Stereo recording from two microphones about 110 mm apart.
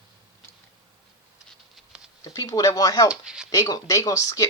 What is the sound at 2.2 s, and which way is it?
Speech, 30° left (ahead or behind).